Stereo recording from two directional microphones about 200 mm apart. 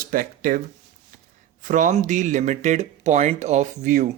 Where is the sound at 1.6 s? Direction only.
40° right (ahead or behind).